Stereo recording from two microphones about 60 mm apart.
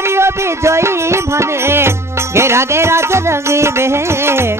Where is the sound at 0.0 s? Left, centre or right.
Right.